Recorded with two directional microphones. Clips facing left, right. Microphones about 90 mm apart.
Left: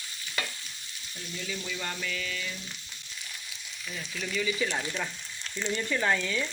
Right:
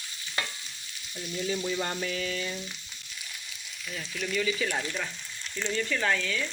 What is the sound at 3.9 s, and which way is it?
Frying, centre (ahead or behind).